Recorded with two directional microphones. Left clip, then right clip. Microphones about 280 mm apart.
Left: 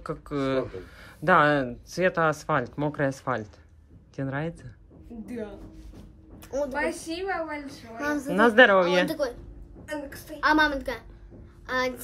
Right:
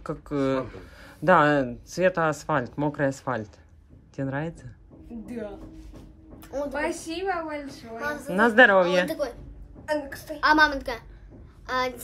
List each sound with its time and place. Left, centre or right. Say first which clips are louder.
0.0 s speech: right 2 dB; centre
6.4 s a sound: left 2 dB; left
6.7 s speech: even; centre
8.0 s a woman's voice: left 2 dB; left
8.3 s a child's voice: even; centre